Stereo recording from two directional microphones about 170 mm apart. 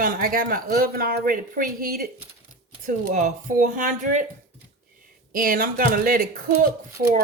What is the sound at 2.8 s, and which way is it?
Speech, 50° right (ahead or behind).